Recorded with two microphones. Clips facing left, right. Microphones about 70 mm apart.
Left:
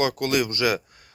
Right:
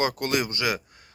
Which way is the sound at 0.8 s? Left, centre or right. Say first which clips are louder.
Even; right.